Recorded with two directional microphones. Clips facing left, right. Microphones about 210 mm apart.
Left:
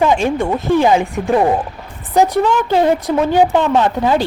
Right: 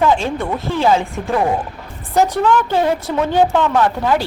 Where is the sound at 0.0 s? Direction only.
15° left (ahead or behind).